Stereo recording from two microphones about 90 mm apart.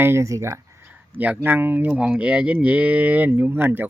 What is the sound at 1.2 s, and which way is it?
Speech, 20° right (ahead or behind).